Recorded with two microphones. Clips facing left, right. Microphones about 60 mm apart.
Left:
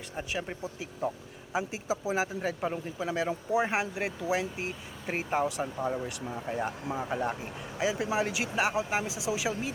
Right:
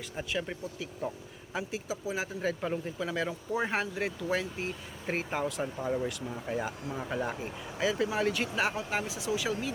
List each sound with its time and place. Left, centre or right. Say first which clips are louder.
0.2 s speech: even; centre
0.6 s speech: left 3 dB; left
2.4 s speech: even; centre